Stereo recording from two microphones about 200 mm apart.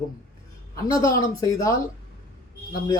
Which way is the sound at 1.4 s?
15° left (ahead or behind).